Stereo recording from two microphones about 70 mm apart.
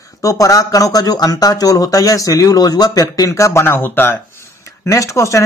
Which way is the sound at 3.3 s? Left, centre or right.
Left.